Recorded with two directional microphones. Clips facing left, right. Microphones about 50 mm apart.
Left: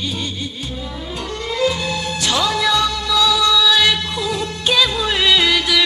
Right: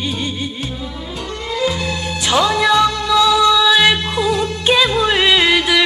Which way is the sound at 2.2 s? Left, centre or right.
Right.